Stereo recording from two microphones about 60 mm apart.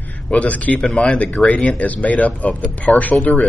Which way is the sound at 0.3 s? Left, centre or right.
Left.